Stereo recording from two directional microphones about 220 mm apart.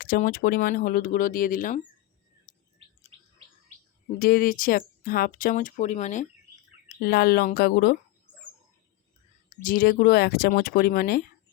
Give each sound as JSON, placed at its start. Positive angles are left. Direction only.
{"t": 0.0, "sound": "speech", "side_deg": 40}
{"t": 2.5, "sound": "bird", "side_deg": 35}
{"t": 4.2, "sound": "speech", "side_deg": 40}
{"t": 7.0, "sound": "speech", "side_deg": 45}
{"t": 9.5, "sound": "speech", "side_deg": 40}